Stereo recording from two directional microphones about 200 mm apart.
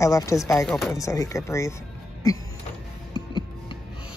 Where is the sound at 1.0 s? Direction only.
15° left (ahead or behind).